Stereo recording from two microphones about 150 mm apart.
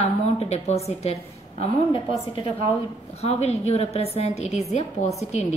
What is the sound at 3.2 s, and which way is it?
A woman's voice, 45° left (ahead or behind).